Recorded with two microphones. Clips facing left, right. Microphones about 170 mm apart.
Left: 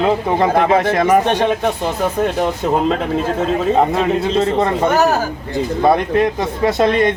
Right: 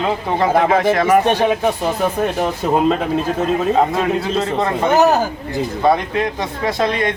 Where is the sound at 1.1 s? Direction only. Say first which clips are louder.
Even; 10° right (ahead or behind).